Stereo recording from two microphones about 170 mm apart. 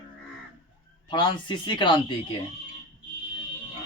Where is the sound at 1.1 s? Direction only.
30° left (ahead or behind).